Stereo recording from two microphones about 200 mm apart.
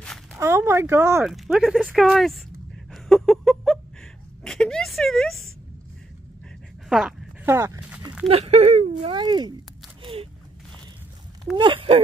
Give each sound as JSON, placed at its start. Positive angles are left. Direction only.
{"t": 0.4, "sound": "speech", "side_deg": -15}
{"t": 1.3, "sound": "speech", "side_deg": 0}
{"t": 2.9, "sound": "a sound", "side_deg": 0}
{"t": 4.5, "sound": "speech", "side_deg": 5}
{"t": 6.9, "sound": "speech", "side_deg": 0}
{"t": 7.4, "sound": "a sound", "side_deg": -15}
{"t": 8.3, "sound": "speech", "side_deg": -35}
{"t": 11.5, "sound": "speech", "side_deg": -25}